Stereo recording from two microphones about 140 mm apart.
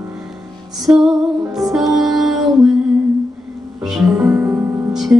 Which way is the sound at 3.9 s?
Centre (ahead or behind).